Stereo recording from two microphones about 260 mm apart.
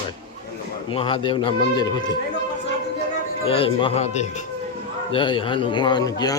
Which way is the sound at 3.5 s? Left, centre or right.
Left.